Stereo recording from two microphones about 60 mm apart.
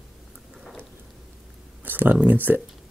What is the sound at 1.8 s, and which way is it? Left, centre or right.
Speech, right.